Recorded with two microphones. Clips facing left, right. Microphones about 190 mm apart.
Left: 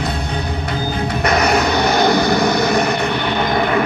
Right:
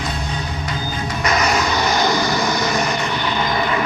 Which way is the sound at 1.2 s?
60° left (ahead or behind).